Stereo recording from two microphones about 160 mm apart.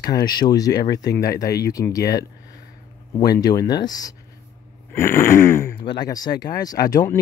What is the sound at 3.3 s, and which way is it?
Speech, 25° left (ahead or behind).